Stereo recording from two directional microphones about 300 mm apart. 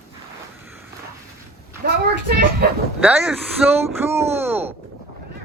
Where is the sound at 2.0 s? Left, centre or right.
Right.